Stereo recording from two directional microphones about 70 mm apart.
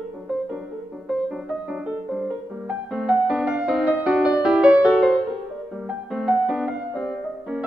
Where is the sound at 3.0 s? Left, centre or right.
Centre.